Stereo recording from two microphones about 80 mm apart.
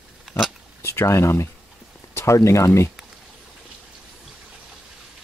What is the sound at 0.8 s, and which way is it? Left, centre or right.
Speech, left.